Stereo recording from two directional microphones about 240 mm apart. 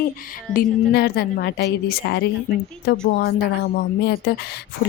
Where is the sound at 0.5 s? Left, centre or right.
Left.